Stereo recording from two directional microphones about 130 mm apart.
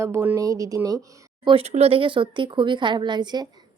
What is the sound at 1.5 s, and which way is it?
A woman's voice, 50° right (ahead or behind).